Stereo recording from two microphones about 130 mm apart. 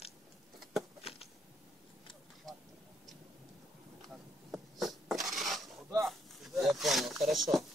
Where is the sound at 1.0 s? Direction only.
50° left (ahead or behind).